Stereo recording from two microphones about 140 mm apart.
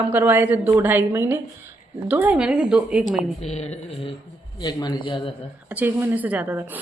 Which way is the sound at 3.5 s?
50° left (ahead or behind).